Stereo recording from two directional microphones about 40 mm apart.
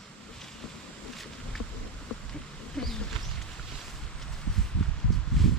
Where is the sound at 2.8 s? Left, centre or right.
Centre.